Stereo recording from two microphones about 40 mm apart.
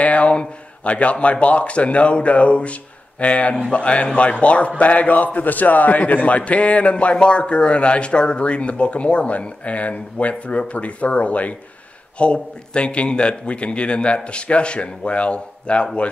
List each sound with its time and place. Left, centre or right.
0.0 s a man's voice: left